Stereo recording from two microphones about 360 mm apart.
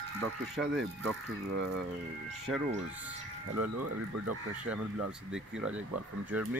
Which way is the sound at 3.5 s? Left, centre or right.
Right.